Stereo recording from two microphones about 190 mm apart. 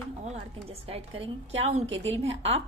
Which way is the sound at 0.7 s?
35° right (ahead or behind).